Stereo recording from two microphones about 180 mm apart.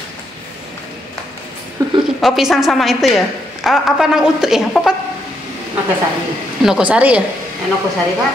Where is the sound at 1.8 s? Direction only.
20° right (ahead or behind).